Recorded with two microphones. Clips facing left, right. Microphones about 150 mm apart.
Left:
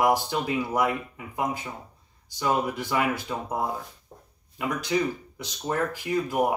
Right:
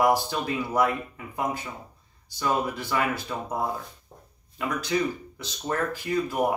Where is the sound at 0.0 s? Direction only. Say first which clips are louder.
Even; 15° left (ahead or behind).